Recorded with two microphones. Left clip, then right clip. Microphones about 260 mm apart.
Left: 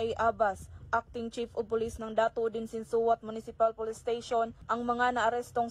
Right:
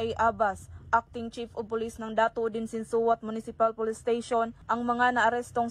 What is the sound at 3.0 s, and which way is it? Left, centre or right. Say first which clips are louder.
Speech: right 2 dB; right.